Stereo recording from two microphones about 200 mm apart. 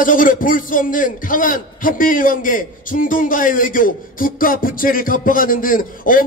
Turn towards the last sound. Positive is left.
turn(degrees=45)  # may be behind; listen again after turning